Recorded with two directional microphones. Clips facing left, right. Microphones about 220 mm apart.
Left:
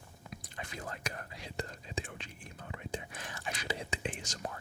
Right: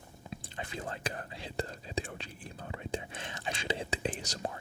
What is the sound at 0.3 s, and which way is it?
Whispering, 30° right (ahead or behind).